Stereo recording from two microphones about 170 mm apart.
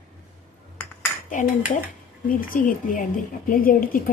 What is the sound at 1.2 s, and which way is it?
Dishes, 50° left (ahead or behind).